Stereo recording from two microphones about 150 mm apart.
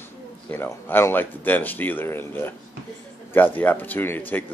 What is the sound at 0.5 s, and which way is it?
Speech, 15° left (ahead or behind).